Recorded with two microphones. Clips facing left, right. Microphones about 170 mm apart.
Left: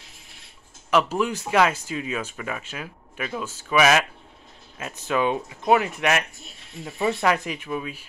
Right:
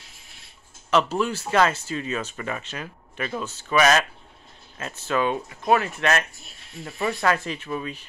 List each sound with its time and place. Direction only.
0.8 s speech: 10° left (ahead or behind)